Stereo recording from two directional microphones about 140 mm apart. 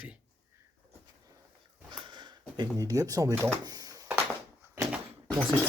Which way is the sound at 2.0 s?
30° right (ahead or behind).